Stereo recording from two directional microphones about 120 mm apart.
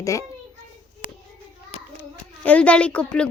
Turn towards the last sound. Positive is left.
turn(degrees=10)  # may be behind; listen again after turning